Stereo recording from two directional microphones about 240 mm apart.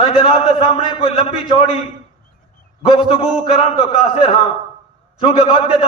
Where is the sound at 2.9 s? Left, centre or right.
Left.